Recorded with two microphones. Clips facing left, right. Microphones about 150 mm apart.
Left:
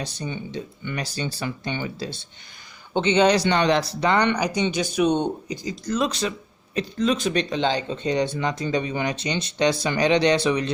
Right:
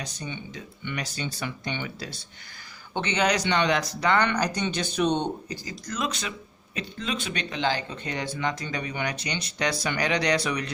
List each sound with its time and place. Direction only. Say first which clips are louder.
0.0 s speech: left 5 dB; 30° left (ahead or behind)
4.4 s speech: left 4 dB; 10° left (ahead or behind)
5.8 s speech: left 7 dB; 30° left (ahead or behind)